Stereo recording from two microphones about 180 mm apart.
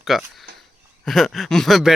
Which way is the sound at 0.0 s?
Centre (ahead or behind).